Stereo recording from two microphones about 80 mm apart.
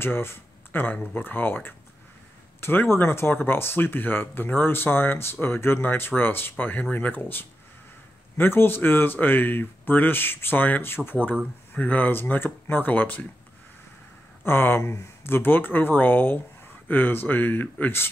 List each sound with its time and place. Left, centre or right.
0.0 s speech: left
14.4 s speech: left